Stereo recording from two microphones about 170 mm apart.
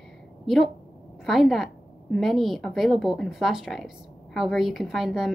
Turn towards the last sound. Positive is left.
turn(degrees=0)  # may be behind; listen again after turning